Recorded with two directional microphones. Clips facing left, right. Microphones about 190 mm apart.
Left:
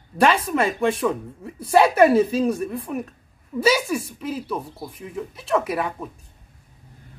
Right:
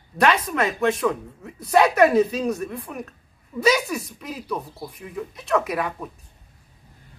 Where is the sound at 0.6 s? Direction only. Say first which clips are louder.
Right 2 dB; 30° left (ahead or behind).